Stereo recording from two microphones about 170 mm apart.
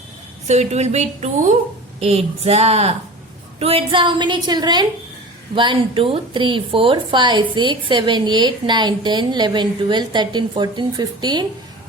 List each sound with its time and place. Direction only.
0.4 s a woman's voice: 40° right (ahead or behind); by 11.4 s 25° right (ahead or behind)